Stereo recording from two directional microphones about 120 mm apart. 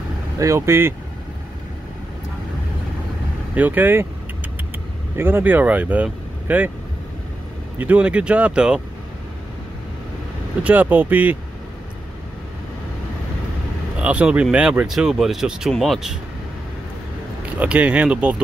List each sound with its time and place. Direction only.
0.4 s speech: 25° right (ahead or behind)
3.5 s speech: 15° right (ahead or behind)
5.1 s speech: 20° right (ahead or behind)
7.8 s speech: 10° right (ahead or behind)
10.6 s speech: 15° right (ahead or behind)
13.9 s speech: 10° right (ahead or behind)
17.6 s speech: 10° right (ahead or behind)